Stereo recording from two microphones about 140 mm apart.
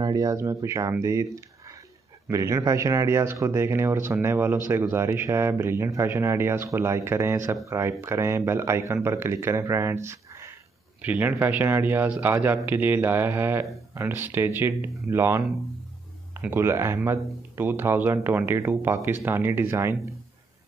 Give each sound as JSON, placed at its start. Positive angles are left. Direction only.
{"t": 0.0, "sound": "speech", "side_deg": -25}